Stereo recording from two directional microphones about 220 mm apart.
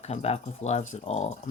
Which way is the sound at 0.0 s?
30° left (ahead or behind).